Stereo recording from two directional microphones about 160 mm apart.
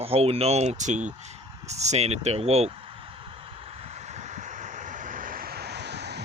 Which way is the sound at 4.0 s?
45° right (ahead or behind).